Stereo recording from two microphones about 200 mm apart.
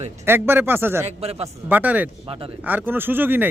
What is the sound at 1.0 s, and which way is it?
Speech, 30° right (ahead or behind).